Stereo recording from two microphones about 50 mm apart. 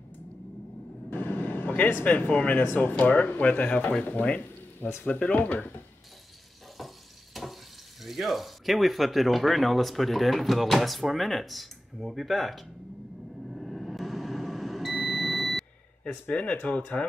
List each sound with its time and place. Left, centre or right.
1.1 s vehicle: left
2.2 s speech: left
6.8 s a sound: centre
7.3 s frying: centre
8.0 s speech: centre
13.5 s a sound: centre
16.0 s speech: left